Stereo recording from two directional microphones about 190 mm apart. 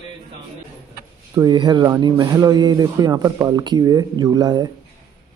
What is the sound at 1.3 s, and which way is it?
Speech, 20° right (ahead or behind).